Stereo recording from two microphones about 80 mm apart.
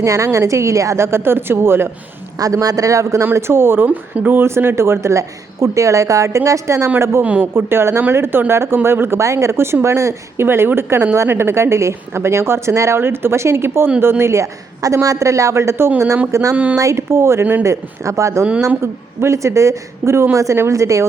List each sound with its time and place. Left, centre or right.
0.0 s speech: right
2.4 s a man's voice: right